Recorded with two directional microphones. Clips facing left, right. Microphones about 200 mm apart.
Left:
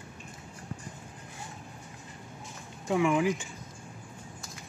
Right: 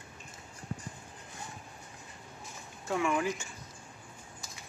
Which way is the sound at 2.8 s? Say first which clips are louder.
Left 5 dB; 15° left (ahead or behind).